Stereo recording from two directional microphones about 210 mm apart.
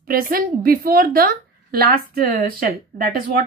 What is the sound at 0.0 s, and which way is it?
A woman's voice, 45° right (ahead or behind).